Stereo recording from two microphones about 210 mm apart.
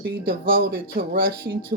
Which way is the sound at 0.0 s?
45° right (ahead or behind).